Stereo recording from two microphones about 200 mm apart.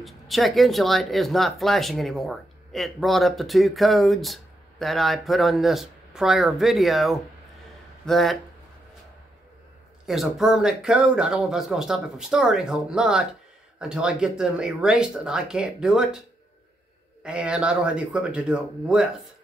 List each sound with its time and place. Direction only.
0.0 s speech: centre (ahead or behind)
10.0 s speech: centre (ahead or behind)
17.2 s speech: 5° right (ahead or behind)